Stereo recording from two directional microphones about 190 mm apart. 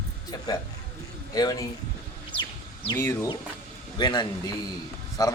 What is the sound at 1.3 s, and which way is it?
Speech, 20° left (ahead or behind).